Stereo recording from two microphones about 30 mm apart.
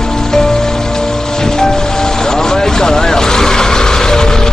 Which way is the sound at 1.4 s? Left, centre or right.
Left.